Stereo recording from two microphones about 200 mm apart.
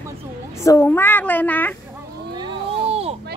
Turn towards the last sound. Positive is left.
turn(degrees=-30)  # may be behind; listen again after turning